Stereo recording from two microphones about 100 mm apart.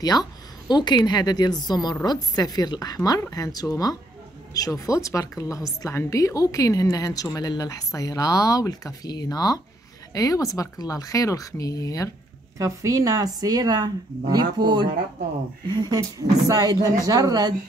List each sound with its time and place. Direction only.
0.0 s a woman's voice: 40° left (ahead or behind)
12.5 s speech: 35° right (ahead or behind)